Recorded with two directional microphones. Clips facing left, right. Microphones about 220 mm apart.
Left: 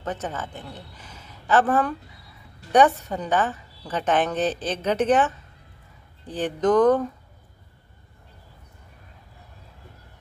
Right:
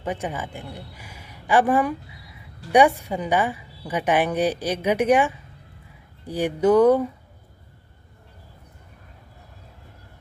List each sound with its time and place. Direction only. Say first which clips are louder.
0.0 s a man's voice: right 2 dB; 10° right (ahead or behind)